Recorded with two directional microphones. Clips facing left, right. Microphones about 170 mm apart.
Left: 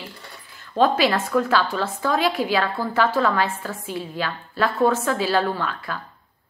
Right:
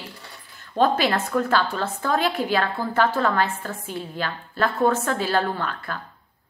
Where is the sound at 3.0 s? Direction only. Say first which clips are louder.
Left 1 dB; 50° right (ahead or behind).